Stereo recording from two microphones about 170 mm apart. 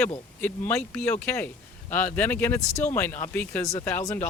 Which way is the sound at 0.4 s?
10° left (ahead or behind).